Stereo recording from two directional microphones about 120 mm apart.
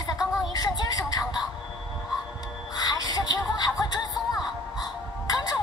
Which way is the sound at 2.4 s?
35° left (ahead or behind).